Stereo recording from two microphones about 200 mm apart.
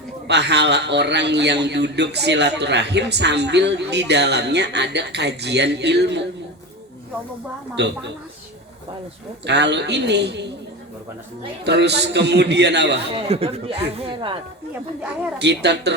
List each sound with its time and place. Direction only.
0.3 s a man's voice: 55° right (ahead or behind)
7.8 s a man's voice: 60° right (ahead or behind)
9.5 s a man's voice: 60° right (ahead or behind)
11.6 s a man's voice: 55° right (ahead or behind)
13.1 s speech: 30° right (ahead or behind)
15.4 s a man's voice: 55° right (ahead or behind)